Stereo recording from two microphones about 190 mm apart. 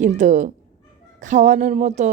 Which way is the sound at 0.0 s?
40° right (ahead or behind).